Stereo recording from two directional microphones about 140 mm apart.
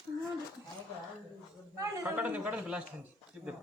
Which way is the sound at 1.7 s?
20° right (ahead or behind).